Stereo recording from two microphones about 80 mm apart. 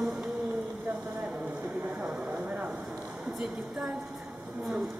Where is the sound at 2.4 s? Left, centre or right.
Centre.